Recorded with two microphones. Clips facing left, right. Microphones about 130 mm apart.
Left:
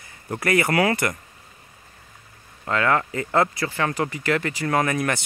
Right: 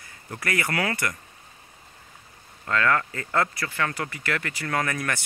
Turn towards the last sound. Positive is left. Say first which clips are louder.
# left 5 dB
turn(degrees=20)  # may be behind; listen again after turning